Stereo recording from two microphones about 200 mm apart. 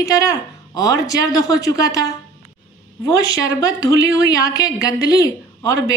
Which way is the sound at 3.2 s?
70° right (ahead or behind).